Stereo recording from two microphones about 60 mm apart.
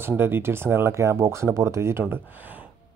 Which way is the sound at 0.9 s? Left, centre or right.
Right.